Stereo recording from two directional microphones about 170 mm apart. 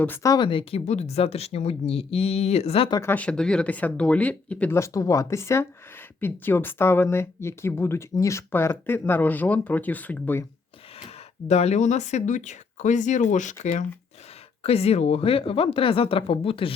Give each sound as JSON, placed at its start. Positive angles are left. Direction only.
{"t": 0.0, "sound": "speech", "side_deg": 15}
{"t": 3.0, "sound": "speech", "side_deg": 10}
{"t": 11.4, "sound": "speech", "side_deg": 40}